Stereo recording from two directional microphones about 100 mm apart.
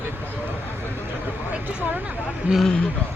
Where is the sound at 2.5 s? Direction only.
5° left (ahead or behind).